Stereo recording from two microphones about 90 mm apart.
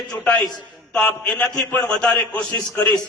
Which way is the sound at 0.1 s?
15° left (ahead or behind).